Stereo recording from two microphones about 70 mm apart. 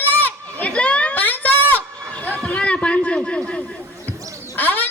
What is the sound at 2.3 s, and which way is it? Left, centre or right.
Chatter, centre.